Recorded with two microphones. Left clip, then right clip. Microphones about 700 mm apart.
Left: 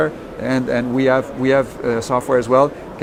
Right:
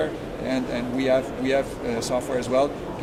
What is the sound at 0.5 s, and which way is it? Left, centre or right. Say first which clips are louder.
Speech: left 9 dB; left.